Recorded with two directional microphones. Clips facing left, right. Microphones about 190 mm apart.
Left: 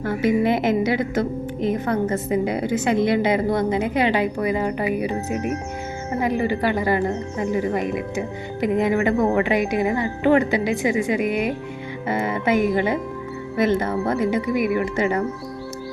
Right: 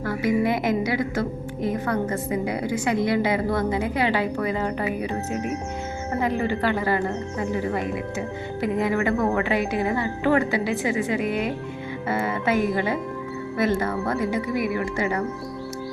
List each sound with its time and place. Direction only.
0.0 s a woman's voice: 25° left (ahead or behind)
12.0 s music: 15° left (ahead or behind)
12.7 s a woman's voice: 20° left (ahead or behind)